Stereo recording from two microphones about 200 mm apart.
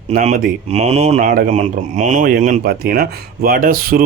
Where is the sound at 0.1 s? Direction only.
35° right (ahead or behind).